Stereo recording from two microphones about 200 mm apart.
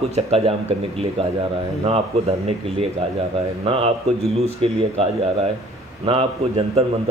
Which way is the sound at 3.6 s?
30° right (ahead or behind).